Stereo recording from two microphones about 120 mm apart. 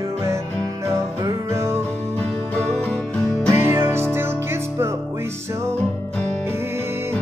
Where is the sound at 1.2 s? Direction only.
25° right (ahead or behind).